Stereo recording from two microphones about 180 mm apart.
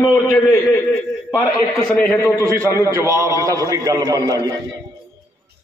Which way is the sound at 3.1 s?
15° right (ahead or behind).